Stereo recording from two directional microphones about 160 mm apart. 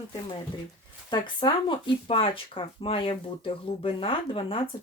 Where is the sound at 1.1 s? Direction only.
30° left (ahead or behind).